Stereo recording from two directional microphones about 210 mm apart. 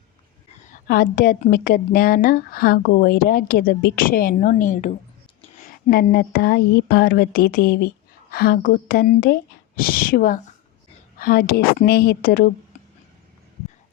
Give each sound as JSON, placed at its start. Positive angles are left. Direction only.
{"t": 0.7, "sound": "a woman's voice", "side_deg": 45}